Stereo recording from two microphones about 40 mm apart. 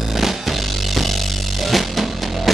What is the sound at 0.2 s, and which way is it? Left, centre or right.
Music, centre.